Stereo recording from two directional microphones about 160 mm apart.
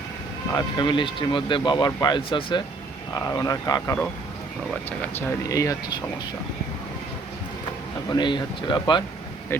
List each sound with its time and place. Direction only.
0.5 s speech: 30° left (ahead or behind)
8.1 s speech: 30° left (ahead or behind)
9.5 s speech: 15° left (ahead or behind)